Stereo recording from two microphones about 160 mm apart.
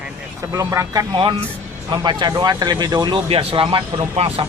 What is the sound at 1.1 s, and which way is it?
Speech, 30° right (ahead or behind).